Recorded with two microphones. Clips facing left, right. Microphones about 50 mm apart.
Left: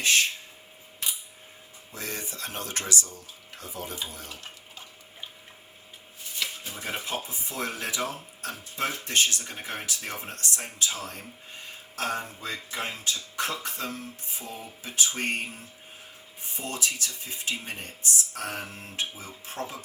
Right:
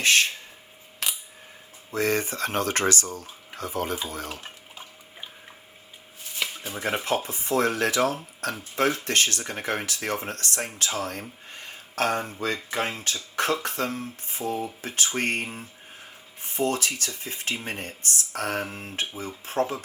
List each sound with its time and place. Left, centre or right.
1.0 s coin: right
1.9 s speech: right
6.7 s speech: right
13.9 s speech: right
16.4 s speech: right
18.6 s speech: right
18.9 s speech: right